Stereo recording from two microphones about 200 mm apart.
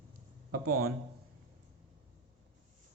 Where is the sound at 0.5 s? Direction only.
50° right (ahead or behind).